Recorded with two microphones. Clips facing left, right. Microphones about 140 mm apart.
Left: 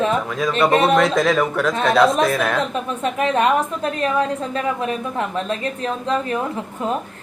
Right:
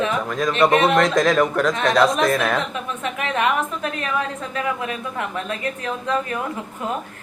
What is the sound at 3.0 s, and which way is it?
A woman's voice, 35° left (ahead or behind).